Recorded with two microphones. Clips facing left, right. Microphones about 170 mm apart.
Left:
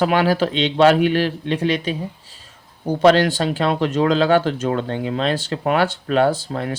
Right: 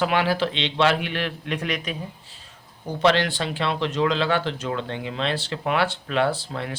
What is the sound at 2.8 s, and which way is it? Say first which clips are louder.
Speech: left 6 dB; 40° left (ahead or behind).